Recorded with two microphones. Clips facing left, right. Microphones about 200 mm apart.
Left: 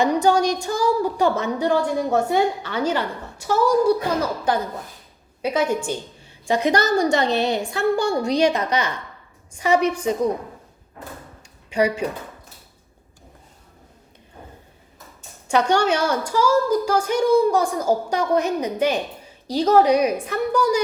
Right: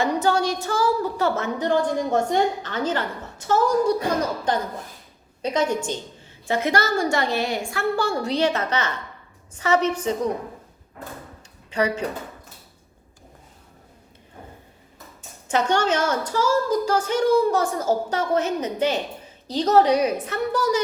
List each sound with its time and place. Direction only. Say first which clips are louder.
0.0 s a woman's voice: left 3 dB; 15° left (ahead or behind)
5.4 s a woman's voice: left 1 dB; 10° left (ahead or behind)
11.7 s a woman's voice: left 3 dB; 10° left (ahead or behind)
15.4 s a woman's voice: left 2 dB; 10° left (ahead or behind)